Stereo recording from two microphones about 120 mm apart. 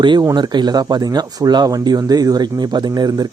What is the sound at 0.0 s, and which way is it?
Speech, 40° right (ahead or behind).